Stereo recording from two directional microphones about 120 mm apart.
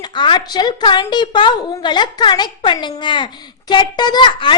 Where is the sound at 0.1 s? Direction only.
40° left (ahead or behind).